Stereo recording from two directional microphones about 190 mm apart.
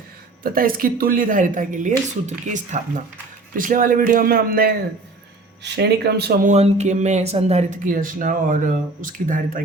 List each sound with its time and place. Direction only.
0.4 s speech: 50° right (ahead or behind)
5.6 s speech: 65° right (ahead or behind)
6.5 s speech: 35° right (ahead or behind)